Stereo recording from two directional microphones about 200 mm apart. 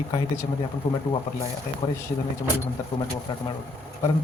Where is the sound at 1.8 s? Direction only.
20° left (ahead or behind).